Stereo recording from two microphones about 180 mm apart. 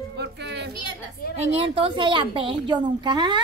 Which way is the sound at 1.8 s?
25° right (ahead or behind).